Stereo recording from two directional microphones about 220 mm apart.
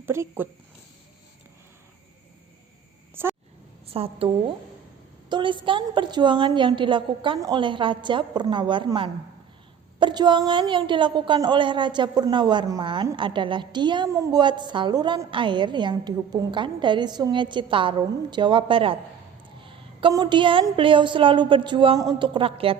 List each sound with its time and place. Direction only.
0.0 s speech: 10° right (ahead or behind)
3.8 s a woman's voice: 25° right (ahead or behind)
5.3 s a woman's voice: 20° right (ahead or behind)